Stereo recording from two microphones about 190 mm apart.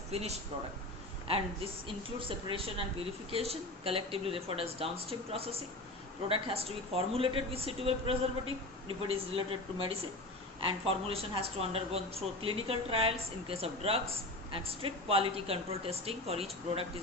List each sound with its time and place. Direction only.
0.1 s a man's voice: 35° right (ahead or behind)